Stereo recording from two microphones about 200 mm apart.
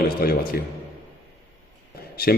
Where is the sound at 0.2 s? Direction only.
50° left (ahead or behind).